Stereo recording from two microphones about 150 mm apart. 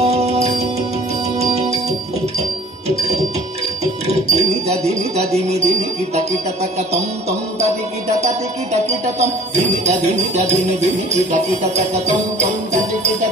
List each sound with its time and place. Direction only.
0.0 s music: 45° right (ahead or behind)
3.8 s music: 45° right (ahead or behind)